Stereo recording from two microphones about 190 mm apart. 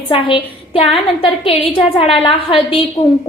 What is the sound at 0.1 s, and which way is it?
A woman's voice, 30° left (ahead or behind).